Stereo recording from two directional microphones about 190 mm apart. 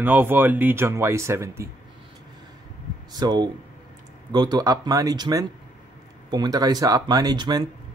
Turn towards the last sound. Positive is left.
turn(degrees=-25)  # may be behind; listen again after turning